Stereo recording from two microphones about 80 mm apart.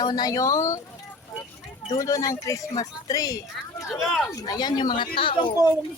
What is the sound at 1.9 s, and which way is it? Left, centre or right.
Speech, left.